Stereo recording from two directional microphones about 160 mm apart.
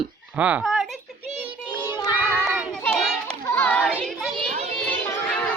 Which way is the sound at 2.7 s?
5° left (ahead or behind).